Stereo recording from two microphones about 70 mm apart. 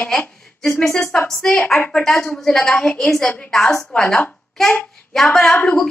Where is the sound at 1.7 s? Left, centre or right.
Left.